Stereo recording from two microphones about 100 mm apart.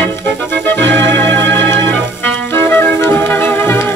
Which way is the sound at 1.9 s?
15° left (ahead or behind).